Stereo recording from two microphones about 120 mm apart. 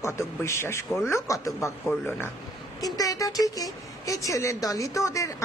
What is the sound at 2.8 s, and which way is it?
A woman's voice, 30° left (ahead or behind).